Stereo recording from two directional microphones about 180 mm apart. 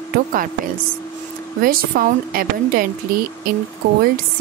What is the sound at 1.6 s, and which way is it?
A woman's voice, 55° right (ahead or behind).